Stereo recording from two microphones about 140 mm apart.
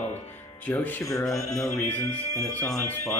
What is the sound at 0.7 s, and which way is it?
Speech, 10° left (ahead or behind).